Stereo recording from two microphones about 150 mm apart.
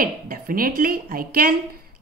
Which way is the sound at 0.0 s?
70° right (ahead or behind).